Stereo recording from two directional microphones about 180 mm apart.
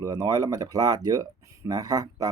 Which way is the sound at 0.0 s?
20° right (ahead or behind).